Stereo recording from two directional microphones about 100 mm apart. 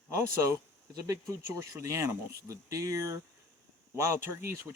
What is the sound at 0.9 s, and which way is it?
Speech, 35° right (ahead or behind).